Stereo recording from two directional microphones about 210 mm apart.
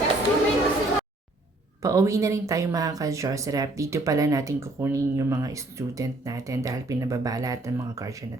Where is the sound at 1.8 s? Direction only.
15° right (ahead or behind).